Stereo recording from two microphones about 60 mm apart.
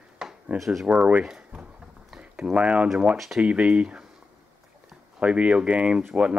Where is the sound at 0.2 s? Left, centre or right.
Centre.